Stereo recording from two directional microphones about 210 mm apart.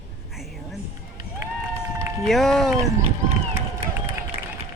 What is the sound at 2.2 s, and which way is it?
Speech, centre (ahead or behind).